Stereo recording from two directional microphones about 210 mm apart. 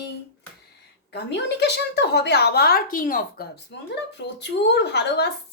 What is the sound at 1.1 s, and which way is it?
A woman's voice, 55° left (ahead or behind).